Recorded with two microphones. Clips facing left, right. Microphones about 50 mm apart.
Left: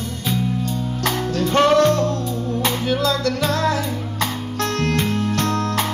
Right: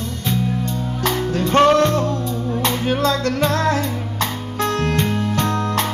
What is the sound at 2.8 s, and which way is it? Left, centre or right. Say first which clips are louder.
Music: right 2 dB; right.